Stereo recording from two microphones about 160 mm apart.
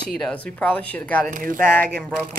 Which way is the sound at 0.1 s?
5° left (ahead or behind).